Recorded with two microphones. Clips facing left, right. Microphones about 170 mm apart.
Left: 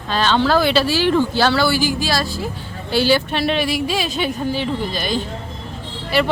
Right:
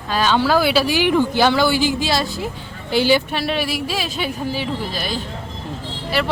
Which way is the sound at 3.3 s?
5° right (ahead or behind).